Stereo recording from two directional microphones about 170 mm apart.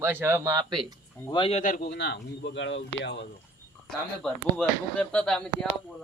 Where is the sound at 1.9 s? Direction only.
80° left.